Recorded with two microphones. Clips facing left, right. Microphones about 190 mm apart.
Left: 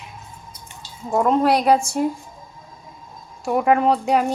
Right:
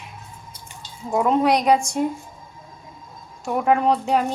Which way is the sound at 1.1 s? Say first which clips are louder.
Left 1 dB; centre (ahead or behind).